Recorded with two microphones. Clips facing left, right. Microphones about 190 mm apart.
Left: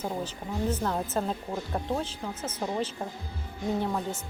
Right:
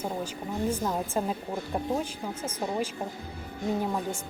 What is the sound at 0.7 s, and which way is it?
Speech, 10° right (ahead or behind).